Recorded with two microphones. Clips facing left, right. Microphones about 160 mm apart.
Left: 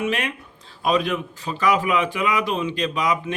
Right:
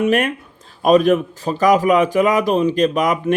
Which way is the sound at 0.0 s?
50° right (ahead or behind).